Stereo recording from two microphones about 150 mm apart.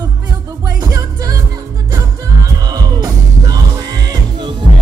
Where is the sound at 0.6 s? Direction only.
25° right (ahead or behind).